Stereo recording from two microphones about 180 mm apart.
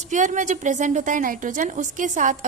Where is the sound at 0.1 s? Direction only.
45° right (ahead or behind).